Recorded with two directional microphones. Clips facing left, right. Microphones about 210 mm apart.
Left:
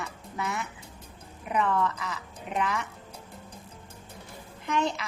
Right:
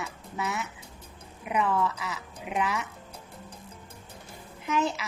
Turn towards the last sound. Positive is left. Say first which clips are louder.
# even
turn(degrees=-5)  # may be behind; listen again after turning